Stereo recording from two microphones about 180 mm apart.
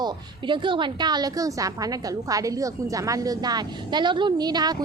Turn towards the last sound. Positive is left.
turn(degrees=-20)  # may be behind; listen again after turning